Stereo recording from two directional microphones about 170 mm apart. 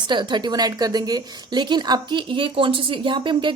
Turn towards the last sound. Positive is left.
turn(degrees=-30)  # may be behind; listen again after turning